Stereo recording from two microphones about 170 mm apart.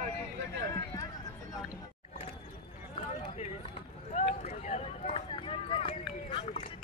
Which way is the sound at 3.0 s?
40° left (ahead or behind).